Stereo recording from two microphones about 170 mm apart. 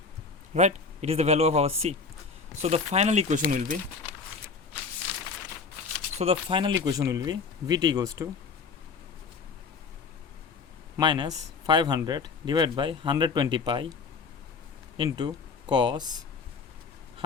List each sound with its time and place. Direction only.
0.5 s a man's voice: 40° right (ahead or behind)
6.1 s a man's voice: 35° right (ahead or behind)
6.8 s speech: 20° right (ahead or behind)
10.9 s speech: 25° right (ahead or behind)
14.9 s speech: 30° right (ahead or behind)